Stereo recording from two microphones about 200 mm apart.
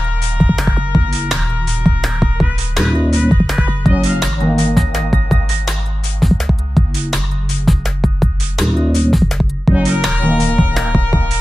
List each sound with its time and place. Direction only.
0.4 s music: 5° right (ahead or behind)